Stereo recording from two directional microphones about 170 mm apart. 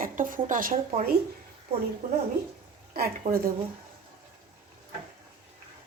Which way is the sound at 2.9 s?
60° right (ahead or behind).